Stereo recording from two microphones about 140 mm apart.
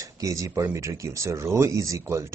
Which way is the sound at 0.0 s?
25° right (ahead or behind).